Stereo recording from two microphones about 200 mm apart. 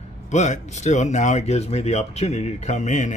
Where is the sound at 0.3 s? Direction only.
35° left (ahead or behind).